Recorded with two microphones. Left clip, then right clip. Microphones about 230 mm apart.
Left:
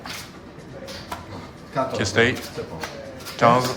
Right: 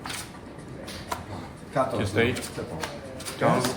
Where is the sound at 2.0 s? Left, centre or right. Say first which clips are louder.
Left 5 dB; left.